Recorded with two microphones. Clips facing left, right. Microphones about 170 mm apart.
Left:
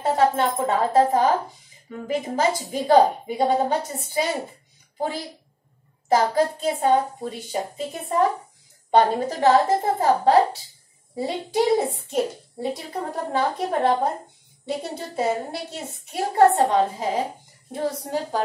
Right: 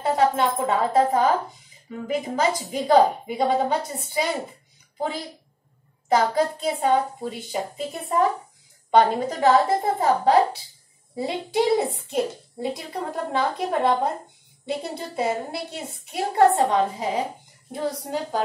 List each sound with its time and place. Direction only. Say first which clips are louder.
0.0 s a woman's voice: left 1 dB; 40° left (ahead or behind)
15.1 s a woman's voice: left 1 dB; 40° left (ahead or behind)